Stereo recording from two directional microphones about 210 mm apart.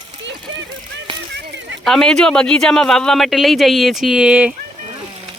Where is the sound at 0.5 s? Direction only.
60° right (ahead or behind).